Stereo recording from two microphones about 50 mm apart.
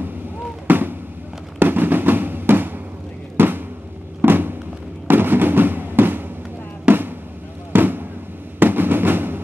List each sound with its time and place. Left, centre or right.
0.7 s fireworks: right
3.3 s a sound: right
4.2 s fireworks: right
6.9 s drum: right
7.7 s fireworks: right